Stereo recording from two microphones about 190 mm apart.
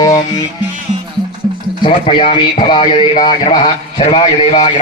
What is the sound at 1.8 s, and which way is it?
Speech, 30° left (ahead or behind).